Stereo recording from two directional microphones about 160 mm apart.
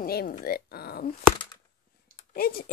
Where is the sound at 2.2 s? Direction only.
70° left (ahead or behind).